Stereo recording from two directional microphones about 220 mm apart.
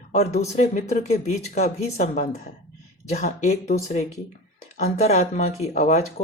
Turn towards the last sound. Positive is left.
turn(degrees=35)  # may be behind; listen again after turning